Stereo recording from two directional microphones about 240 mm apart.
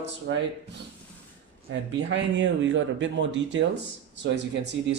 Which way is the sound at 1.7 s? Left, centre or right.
Right.